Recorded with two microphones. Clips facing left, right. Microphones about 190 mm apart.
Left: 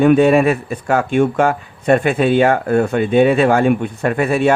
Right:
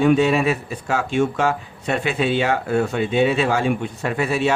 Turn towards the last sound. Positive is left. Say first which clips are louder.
# left 6 dB
turn(degrees=55)  # may be behind; listen again after turning